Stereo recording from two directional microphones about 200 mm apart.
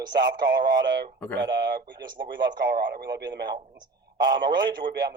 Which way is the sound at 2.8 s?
55° right (ahead or behind).